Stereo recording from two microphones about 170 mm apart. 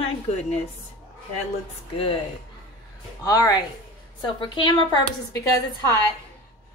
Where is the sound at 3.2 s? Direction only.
20° left (ahead or behind).